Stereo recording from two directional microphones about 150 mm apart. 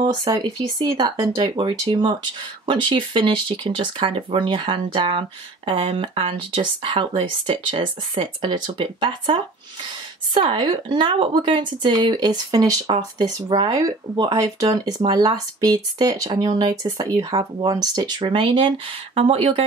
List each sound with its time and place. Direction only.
0.0 s speech: 30° right (ahead or behind)